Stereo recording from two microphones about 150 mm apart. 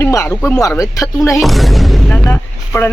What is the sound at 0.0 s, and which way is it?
Speech, 20° left (ahead or behind).